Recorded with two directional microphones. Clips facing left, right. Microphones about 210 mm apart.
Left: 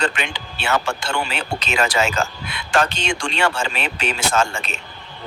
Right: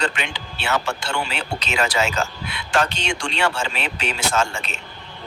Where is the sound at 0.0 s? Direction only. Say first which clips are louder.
Left 2 dB; 50° left (ahead or behind).